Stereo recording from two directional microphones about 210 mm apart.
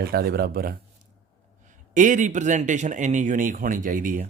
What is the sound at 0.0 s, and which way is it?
A man's voice, 50° right (ahead or behind).